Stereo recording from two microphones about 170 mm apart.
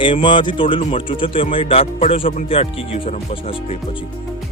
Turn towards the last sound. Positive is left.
turn(degrees=35)  # may be behind; listen again after turning